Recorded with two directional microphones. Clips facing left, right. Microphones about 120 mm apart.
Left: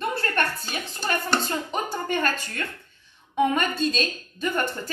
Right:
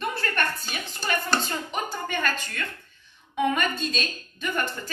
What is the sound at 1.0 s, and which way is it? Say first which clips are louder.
Speech: left 1 dB; 30° left (ahead or behind).